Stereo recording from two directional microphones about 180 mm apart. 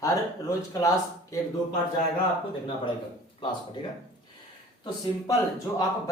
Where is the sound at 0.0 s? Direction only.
20° left (ahead or behind).